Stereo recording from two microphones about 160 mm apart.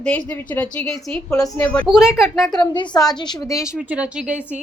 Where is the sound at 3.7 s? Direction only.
5° right (ahead or behind).